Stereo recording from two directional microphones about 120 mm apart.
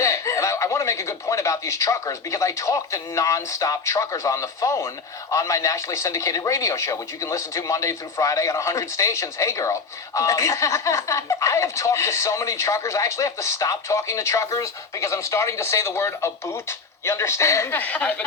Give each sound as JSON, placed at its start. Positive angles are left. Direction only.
{"t": 0.0, "sound": "speech", "side_deg": 25}